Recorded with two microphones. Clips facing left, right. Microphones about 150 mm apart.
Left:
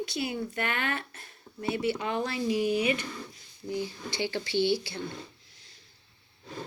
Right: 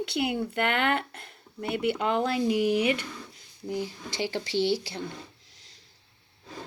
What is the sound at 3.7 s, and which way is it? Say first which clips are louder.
Speech: right 1 dB; 40° right (ahead or behind).